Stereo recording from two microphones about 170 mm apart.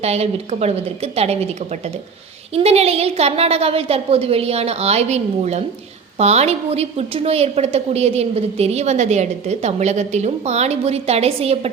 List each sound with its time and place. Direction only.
0.0 s a woman's voice: 40° right (ahead or behind)
2.6 s a woman's voice: 35° right (ahead or behind)